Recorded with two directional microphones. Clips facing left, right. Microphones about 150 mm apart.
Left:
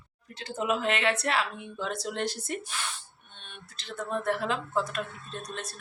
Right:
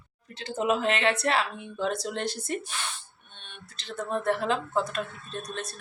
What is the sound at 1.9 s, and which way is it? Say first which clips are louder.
Speech: right 2 dB; 10° left (ahead or behind).